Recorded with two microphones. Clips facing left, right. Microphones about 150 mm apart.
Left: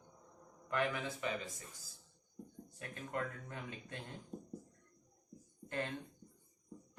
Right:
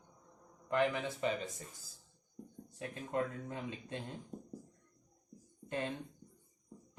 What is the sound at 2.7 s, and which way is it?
Speech, 20° right (ahead or behind).